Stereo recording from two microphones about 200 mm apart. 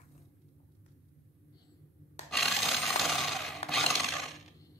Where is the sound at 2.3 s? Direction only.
Centre (ahead or behind).